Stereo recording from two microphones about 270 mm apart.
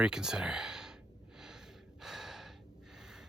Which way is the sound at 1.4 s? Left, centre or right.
Centre.